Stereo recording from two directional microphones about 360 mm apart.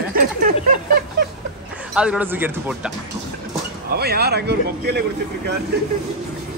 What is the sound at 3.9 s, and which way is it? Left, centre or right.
A man's voice, right.